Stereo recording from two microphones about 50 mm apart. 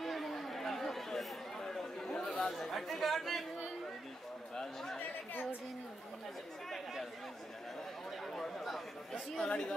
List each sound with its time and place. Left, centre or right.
0.0 s chatter: centre
4.9 s chatter: left
6.7 s chatter: centre
8.2 s a sound: centre
9.5 s a woman's voice: centre